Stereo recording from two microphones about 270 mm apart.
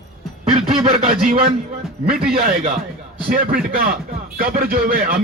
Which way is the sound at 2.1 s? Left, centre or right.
Right.